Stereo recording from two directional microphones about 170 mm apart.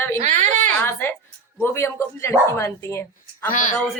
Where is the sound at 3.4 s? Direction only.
50° left (ahead or behind).